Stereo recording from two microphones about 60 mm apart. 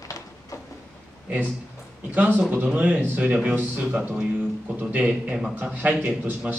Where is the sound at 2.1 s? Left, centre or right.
Right.